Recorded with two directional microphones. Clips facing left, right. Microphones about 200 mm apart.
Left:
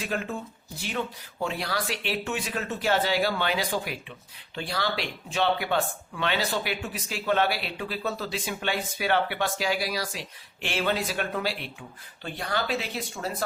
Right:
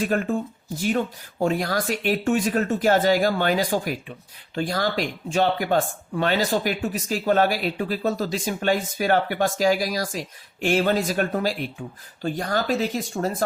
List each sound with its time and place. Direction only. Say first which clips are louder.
0.0 s speech: right 8 dB; 50° right (ahead or behind)